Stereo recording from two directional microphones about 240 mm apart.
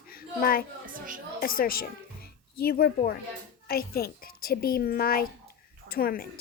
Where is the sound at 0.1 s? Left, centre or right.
Left.